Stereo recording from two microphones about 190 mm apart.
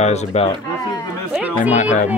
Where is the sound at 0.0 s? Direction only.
35° left (ahead or behind).